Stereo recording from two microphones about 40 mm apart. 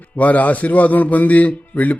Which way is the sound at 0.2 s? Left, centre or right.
Left.